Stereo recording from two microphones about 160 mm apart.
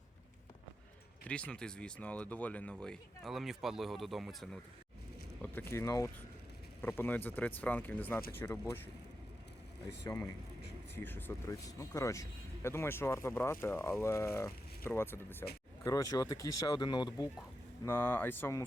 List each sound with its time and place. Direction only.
1.2 s speech: 10° left (ahead or behind)
5.4 s speech: 15° left (ahead or behind)
10.9 s speech: 15° left (ahead or behind); by 17.2 s 30° left (ahead or behind)
17.8 s speech: 15° left (ahead or behind)